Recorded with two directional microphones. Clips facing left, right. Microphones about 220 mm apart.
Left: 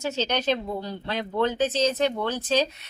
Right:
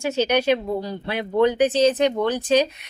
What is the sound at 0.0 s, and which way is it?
A woman's voice, 10° right (ahead or behind).